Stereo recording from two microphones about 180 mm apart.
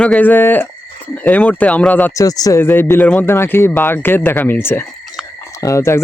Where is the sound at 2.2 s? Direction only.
20° left (ahead or behind).